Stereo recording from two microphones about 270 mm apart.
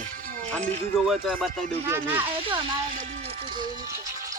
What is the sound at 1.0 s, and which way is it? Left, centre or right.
Speech, centre.